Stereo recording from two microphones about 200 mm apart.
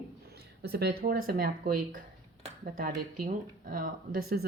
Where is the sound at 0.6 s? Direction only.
55° right (ahead or behind).